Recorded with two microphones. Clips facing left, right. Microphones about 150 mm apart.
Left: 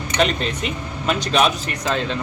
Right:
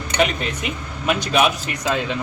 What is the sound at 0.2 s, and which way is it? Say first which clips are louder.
Speech: even; 10° right (ahead or behind).